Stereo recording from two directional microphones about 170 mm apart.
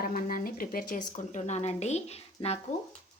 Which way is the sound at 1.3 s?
40° left (ahead or behind).